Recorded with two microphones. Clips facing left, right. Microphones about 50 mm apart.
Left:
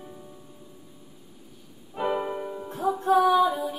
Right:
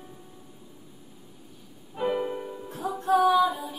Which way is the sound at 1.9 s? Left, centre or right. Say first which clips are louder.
Even; centre.